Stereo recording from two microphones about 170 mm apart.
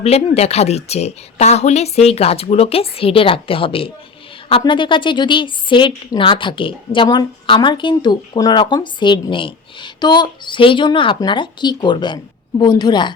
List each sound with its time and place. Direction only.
0.0 s a woman's voice: 40° left (ahead or behind)